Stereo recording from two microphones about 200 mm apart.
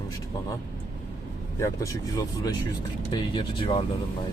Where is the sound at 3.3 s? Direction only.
25° left (ahead or behind).